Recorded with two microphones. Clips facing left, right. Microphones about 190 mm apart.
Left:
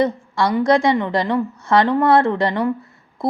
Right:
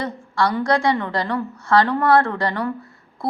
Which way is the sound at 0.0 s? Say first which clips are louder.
Left 4 dB; 20° left (ahead or behind).